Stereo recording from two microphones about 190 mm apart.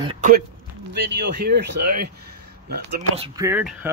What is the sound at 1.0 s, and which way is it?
Speech, 65° right (ahead or behind).